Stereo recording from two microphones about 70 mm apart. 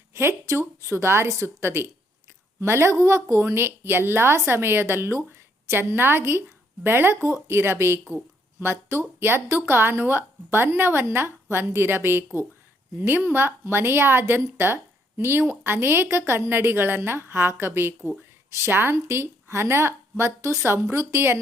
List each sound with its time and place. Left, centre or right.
0.1 s speech: right